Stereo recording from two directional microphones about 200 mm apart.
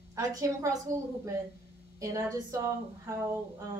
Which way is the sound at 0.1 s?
15° right (ahead or behind).